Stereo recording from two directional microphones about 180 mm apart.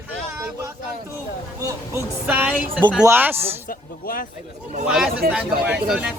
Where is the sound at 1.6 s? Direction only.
15° right (ahead or behind).